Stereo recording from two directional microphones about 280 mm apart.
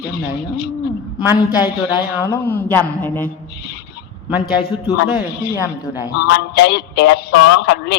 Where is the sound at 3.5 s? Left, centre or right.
Left.